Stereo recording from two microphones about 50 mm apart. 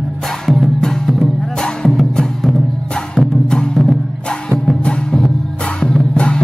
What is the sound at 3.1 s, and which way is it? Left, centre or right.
Music, centre.